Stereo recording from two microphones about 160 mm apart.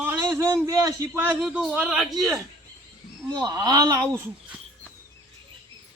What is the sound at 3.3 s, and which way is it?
Speech, 25° right (ahead or behind).